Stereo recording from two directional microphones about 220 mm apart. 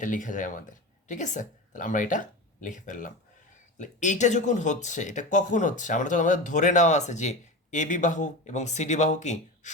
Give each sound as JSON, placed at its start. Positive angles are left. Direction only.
{"t": 0.0, "sound": "speech", "side_deg": 35}